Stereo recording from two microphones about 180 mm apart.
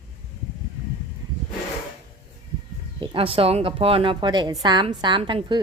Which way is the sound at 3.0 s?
30° right (ahead or behind).